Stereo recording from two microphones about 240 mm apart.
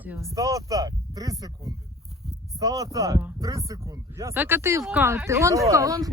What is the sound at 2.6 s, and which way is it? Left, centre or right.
Speech, centre.